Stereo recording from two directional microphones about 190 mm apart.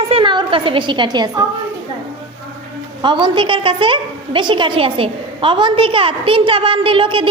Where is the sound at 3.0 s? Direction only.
25° right (ahead or behind).